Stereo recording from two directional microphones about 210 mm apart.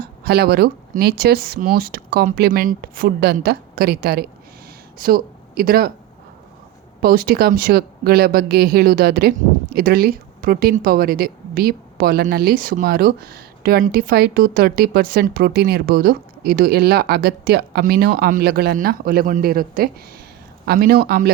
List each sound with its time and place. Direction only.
0.0 s speech: 50° right (ahead or behind)
7.0 s speech: 45° right (ahead or behind)